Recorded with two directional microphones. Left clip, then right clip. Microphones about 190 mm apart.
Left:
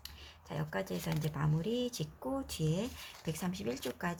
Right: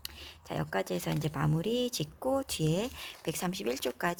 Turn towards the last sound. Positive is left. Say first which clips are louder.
# right 6 dB
turn(degrees=-65)  # may be behind; listen again after turning